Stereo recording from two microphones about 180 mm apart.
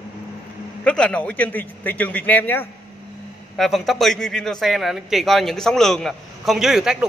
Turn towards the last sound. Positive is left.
turn(degrees=0)  # may be behind; listen again after turning